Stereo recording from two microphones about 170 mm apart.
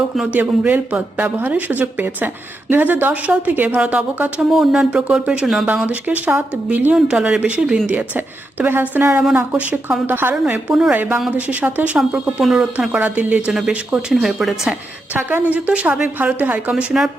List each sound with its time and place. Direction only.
0.2 s a woman's voice: 10° right (ahead or behind)